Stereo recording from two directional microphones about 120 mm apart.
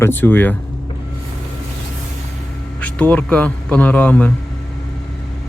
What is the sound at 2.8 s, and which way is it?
Speech, 10° left (ahead or behind).